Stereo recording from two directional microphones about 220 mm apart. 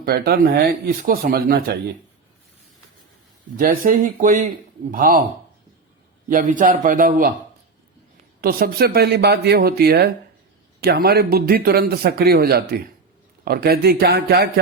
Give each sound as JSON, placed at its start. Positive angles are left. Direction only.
{"t": 0.0, "sound": "speech", "side_deg": -45}
{"t": 3.6, "sound": "a man's voice", "side_deg": -40}
{"t": 6.2, "sound": "a man's voice", "side_deg": -35}
{"t": 8.4, "sound": "speech", "side_deg": -45}